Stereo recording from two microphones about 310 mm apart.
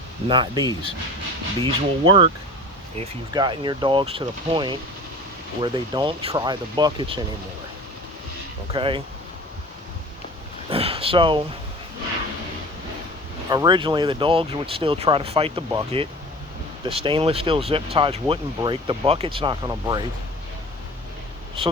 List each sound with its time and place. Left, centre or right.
0.3 s speech: centre
8.7 s speech: centre
10.7 s speech: centre
13.5 s speech: centre
21.6 s speech: centre